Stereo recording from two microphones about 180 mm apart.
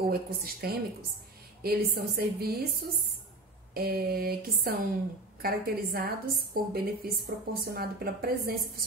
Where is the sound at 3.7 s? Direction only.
60° right (ahead or behind).